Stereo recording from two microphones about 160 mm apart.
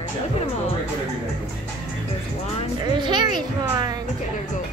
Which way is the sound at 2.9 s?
30° right (ahead or behind).